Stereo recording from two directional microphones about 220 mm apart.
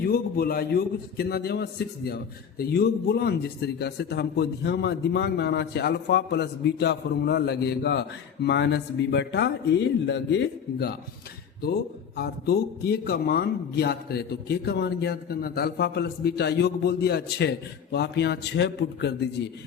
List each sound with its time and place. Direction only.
0.1 s a man's voice: 45° left (ahead or behind)
12.1 s a man's voice: 45° left (ahead or behind)